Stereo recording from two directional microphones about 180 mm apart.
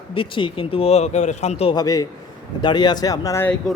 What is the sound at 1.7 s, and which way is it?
Speech, 20° left (ahead or behind).